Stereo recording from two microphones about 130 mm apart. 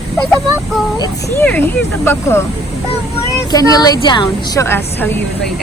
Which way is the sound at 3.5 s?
30° left (ahead or behind).